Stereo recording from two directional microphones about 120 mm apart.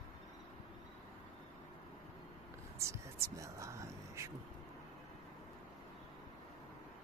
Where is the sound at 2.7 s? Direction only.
25° right (ahead or behind).